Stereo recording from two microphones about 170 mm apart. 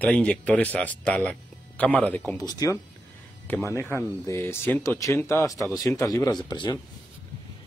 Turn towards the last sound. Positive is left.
turn(degrees=25)  # may be behind; listen again after turning